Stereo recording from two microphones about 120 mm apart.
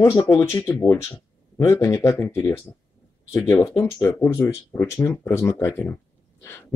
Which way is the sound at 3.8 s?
25° left (ahead or behind).